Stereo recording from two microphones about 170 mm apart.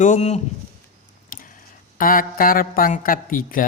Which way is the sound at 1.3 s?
55° left (ahead or behind).